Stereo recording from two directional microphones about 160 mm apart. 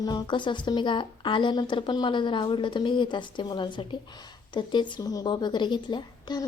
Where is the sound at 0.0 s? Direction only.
30° left (ahead or behind).